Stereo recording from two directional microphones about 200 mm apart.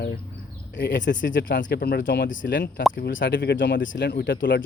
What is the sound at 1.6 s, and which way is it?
Speech, 55° left (ahead or behind).